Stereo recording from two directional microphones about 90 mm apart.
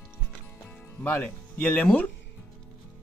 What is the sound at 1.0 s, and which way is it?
Speech, 15° left (ahead or behind).